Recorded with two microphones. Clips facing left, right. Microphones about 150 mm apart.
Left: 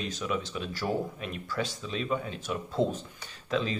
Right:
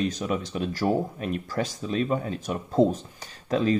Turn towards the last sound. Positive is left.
turn(degrees=-45)  # may be behind; listen again after turning